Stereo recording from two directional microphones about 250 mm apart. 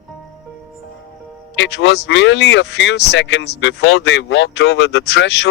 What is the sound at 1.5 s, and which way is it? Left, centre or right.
Speech, left.